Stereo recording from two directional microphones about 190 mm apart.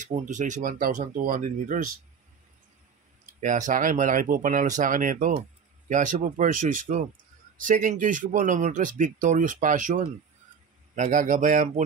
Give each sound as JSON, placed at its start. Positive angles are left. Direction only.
{"t": 0.0, "sound": "speech", "side_deg": -40}
{"t": 3.3, "sound": "speech", "side_deg": -40}